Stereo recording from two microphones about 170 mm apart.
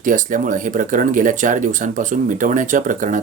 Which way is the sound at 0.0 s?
50° right (ahead or behind).